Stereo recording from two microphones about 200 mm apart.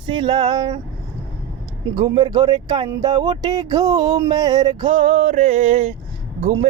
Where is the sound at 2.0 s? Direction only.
20° right (ahead or behind).